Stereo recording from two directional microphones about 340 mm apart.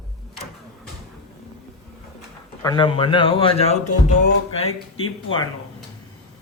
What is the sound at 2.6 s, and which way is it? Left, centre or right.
Speech, centre.